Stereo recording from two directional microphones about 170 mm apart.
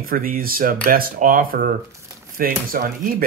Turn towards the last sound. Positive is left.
turn(degrees=-55)  # may be behind; listen again after turning